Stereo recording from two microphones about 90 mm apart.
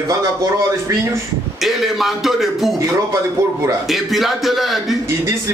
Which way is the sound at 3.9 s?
Centre (ahead or behind).